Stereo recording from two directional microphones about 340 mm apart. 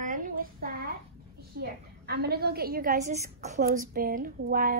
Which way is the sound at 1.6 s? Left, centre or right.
Right.